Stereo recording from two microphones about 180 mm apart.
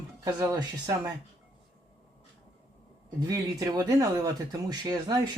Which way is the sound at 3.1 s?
20° right (ahead or behind).